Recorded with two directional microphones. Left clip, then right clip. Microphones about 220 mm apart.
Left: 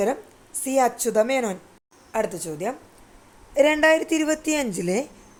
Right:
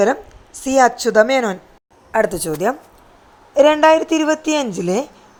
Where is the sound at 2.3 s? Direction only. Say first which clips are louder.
Right 10 dB; 35° right (ahead or behind).